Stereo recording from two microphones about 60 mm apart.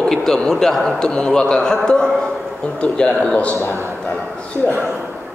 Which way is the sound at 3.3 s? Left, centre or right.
Left.